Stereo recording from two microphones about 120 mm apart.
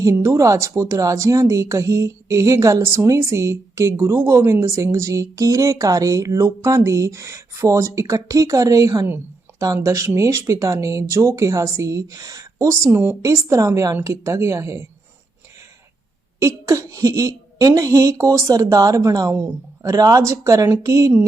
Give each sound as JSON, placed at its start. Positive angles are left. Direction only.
{"t": 0.0, "sound": "speech", "side_deg": -25}
{"t": 16.4, "sound": "speech", "side_deg": -25}